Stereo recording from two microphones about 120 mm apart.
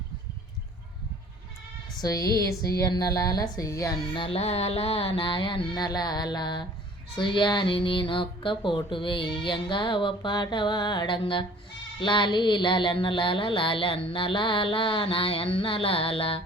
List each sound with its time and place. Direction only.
2.0 s speech: 30° left (ahead or behind)
4.1 s speech: 50° left (ahead or behind)